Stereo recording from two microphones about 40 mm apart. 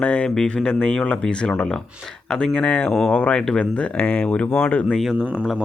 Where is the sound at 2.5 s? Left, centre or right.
Left.